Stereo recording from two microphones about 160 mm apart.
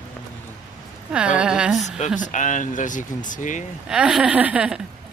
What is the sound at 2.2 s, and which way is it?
Speech, 50° left (ahead or behind).